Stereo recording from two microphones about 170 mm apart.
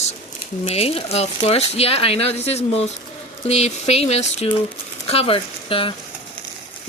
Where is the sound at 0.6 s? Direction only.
35° left (ahead or behind).